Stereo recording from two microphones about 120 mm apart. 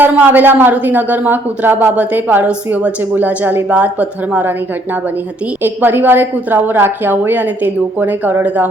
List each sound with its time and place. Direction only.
0.0 s a woman's voice: 15° right (ahead or behind)
5.6 s a woman's voice: 15° right (ahead or behind)